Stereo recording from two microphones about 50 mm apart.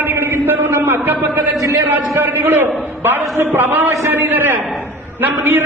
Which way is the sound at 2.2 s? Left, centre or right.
Right.